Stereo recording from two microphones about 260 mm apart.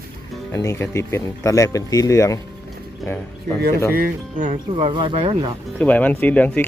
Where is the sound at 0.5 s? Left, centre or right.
Centre.